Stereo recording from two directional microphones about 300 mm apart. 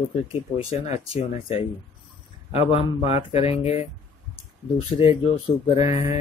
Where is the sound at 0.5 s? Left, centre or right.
Left.